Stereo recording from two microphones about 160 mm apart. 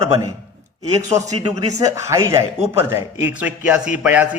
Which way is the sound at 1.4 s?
20° right (ahead or behind).